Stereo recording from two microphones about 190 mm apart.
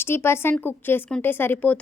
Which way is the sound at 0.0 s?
10° left (ahead or behind).